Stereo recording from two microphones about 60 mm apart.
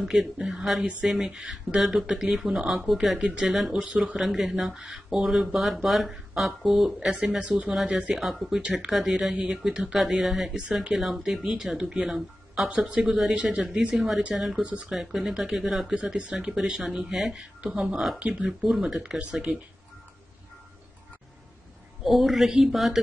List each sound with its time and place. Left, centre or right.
0.5 s speech: centre
8.1 s speech: centre
12.6 s speech: right
13.0 s speech: centre
13.3 s speech: centre
13.9 s speech: centre
14.6 s speech: right
14.9 s speech: centre
22.0 s speech: centre